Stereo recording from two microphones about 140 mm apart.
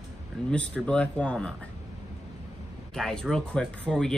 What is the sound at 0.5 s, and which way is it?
Speech, 10° left (ahead or behind).